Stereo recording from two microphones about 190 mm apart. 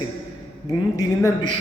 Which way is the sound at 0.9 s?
20° left (ahead or behind).